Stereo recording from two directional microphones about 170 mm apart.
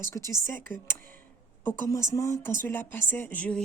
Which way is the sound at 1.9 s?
20° left (ahead or behind).